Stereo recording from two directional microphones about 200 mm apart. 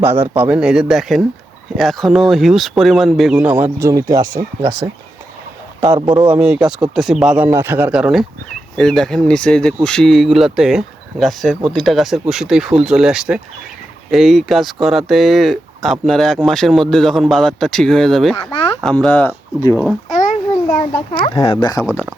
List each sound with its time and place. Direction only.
0.0 s speech: 10° right (ahead or behind)
18.3 s speech: 25° left (ahead or behind)
18.8 s speech: 5° left (ahead or behind)
20.1 s a sound: 35° left (ahead or behind)
21.3 s speech: 25° left (ahead or behind)